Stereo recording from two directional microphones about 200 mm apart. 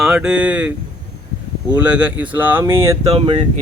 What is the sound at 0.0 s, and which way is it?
Speech, 5° right (ahead or behind).